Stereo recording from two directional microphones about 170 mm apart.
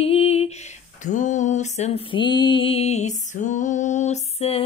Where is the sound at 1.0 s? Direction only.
45° left (ahead or behind).